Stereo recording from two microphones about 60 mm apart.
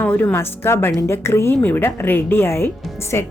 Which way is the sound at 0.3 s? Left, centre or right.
Left.